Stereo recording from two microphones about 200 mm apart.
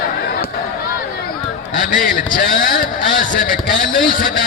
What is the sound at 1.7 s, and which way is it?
A man's voice, 45° left (ahead or behind).